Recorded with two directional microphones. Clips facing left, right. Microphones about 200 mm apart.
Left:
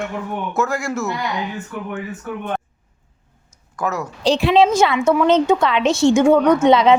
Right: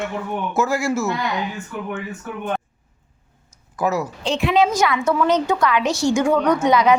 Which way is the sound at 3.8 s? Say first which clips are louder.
Right 2 dB; 5° right (ahead or behind).